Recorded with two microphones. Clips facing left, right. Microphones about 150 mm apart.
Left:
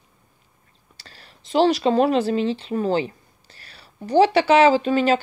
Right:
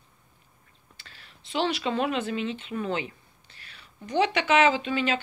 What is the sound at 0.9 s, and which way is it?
Speech, 40° left (ahead or behind).